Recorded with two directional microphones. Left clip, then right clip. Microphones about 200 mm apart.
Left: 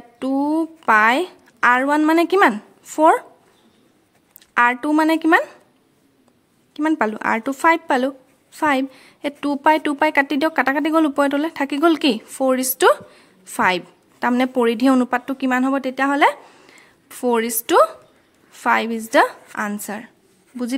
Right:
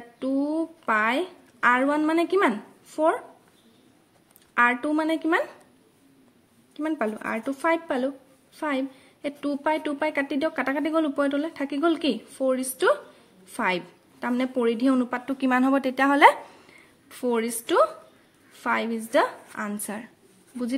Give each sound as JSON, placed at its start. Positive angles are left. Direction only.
{"t": 0.2, "sound": "a woman's voice", "side_deg": 30}
{"t": 4.6, "sound": "a woman's voice", "side_deg": 30}
{"t": 6.7, "sound": "a woman's voice", "side_deg": 30}
{"t": 16.6, "sound": "a woman's voice", "side_deg": 25}